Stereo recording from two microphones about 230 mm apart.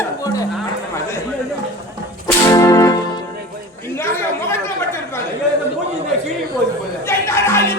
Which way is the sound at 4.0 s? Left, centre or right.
Centre.